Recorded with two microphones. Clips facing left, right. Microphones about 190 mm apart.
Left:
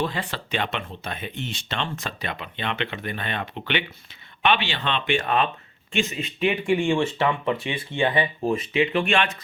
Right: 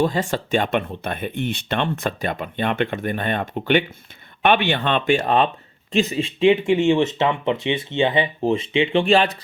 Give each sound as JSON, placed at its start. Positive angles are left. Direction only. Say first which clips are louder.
{"t": 0.0, "sound": "speech", "louder": "right 7 dB", "side_deg": -45}